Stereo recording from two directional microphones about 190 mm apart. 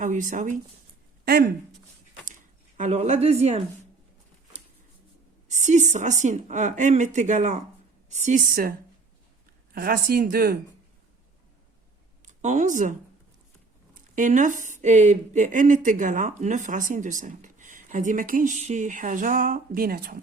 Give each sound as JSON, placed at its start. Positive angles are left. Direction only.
{"t": 0.0, "sound": "a woman's voice", "side_deg": -40}
{"t": 2.2, "sound": "a sound", "side_deg": -40}
{"t": 5.5, "sound": "a woman's voice", "side_deg": -40}
{"t": 9.7, "sound": "a woman's voice", "side_deg": -50}
{"t": 12.2, "sound": "speech", "side_deg": -40}
{"t": 14.2, "sound": "a woman's voice", "side_deg": -40}